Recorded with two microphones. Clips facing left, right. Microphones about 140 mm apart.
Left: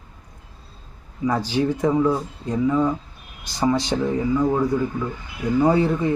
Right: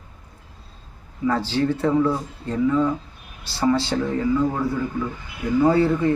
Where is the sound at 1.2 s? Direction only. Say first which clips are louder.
Even; 15° left (ahead or behind).